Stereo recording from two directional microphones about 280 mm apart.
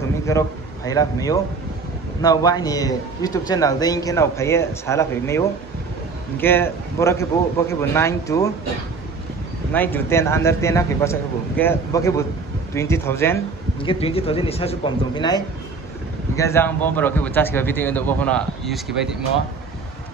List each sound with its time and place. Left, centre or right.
0.3 s a man's voice: centre
9.7 s a man's voice: centre